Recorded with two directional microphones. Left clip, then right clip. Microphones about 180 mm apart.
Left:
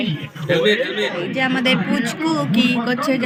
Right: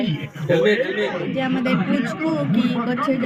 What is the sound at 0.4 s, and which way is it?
Speech, 5° right (ahead or behind).